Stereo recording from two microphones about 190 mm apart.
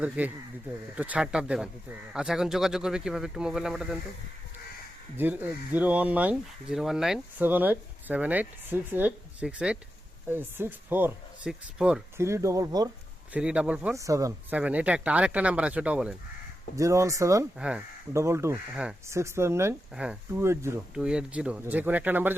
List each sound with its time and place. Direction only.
0.2 s speech: 5° right (ahead or behind)
5.1 s speech: 10° right (ahead or behind)
13.3 s speech: 5° right (ahead or behind)